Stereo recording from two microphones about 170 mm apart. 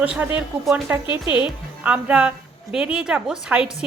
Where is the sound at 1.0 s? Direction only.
25° left (ahead or behind).